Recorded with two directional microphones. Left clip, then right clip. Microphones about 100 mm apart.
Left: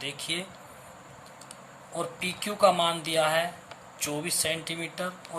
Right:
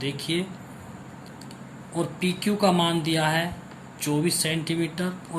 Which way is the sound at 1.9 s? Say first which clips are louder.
Right 4 dB; 35° left (ahead or behind).